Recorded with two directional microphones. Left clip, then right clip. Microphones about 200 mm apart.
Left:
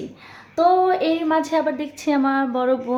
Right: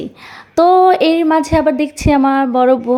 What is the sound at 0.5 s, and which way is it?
A woman's voice, 45° right (ahead or behind).